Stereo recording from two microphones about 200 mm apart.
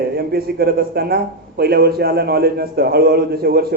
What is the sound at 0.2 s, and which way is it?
A man's voice, 50° right (ahead or behind).